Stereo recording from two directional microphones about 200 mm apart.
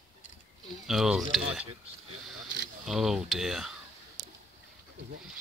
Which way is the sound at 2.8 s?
Centre (ahead or behind).